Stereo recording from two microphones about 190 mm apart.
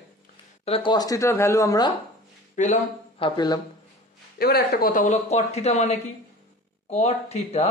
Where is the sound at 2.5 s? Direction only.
40° left (ahead or behind).